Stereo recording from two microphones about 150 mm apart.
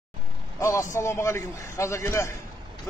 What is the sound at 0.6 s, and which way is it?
A man's voice, 20° left (ahead or behind).